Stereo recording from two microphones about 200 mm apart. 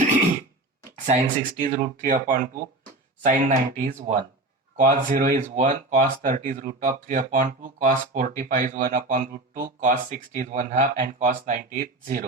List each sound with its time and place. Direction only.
1.0 s speech: 40° right (ahead or behind)